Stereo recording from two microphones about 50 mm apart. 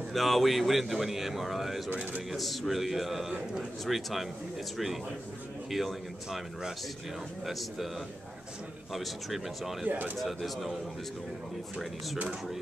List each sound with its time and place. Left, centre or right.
0.1 s speech: centre
5.7 s speech: centre
7.4 s speech: centre
8.9 s speech: centre
9.8 s speech: right
10.1 s speech: centre